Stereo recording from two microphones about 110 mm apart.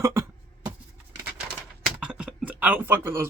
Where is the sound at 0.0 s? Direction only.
25° right (ahead or behind).